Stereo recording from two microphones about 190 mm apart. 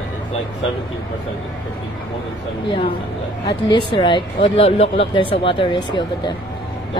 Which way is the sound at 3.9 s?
25° left (ahead or behind).